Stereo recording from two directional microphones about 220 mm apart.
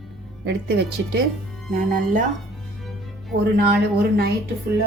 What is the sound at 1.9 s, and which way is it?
Speech, 35° right (ahead or behind).